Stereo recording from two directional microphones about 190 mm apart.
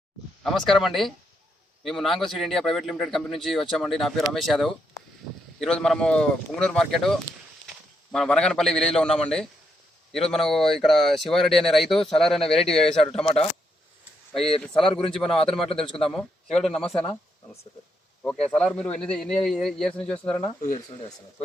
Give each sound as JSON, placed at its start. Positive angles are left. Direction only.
{"t": 0.4, "sound": "speech", "side_deg": 0}
{"t": 13.2, "sound": "speech", "side_deg": 30}
{"t": 14.7, "sound": "a man's voice", "side_deg": 25}
{"t": 15.9, "sound": "speech", "side_deg": 0}